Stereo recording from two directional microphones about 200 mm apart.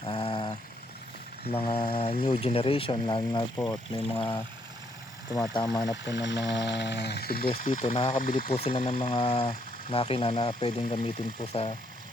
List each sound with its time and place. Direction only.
0.0 s a sound: 25° left (ahead or behind)
1.5 s speech: 30° left (ahead or behind)
4.2 s speech: 10° left (ahead or behind)
6.1 s speech: 60° left (ahead or behind)
7.5 s speech: 35° left (ahead or behind)